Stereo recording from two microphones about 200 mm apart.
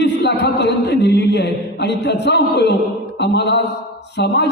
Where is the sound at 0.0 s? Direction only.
60° left (ahead or behind).